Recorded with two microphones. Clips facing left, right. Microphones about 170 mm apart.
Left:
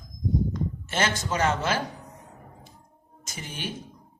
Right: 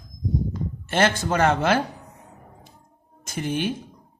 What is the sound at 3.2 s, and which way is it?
Speech, 55° right (ahead or behind).